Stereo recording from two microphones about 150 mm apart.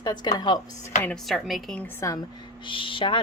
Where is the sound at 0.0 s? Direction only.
25° left (ahead or behind).